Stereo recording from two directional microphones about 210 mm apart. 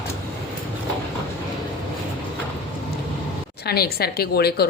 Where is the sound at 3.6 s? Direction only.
50° left (ahead or behind).